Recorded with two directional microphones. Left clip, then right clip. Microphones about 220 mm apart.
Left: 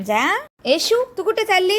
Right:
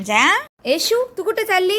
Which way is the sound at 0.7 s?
Centre (ahead or behind).